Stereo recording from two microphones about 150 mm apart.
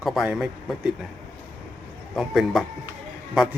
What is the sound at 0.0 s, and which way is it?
Speech, centre (ahead or behind).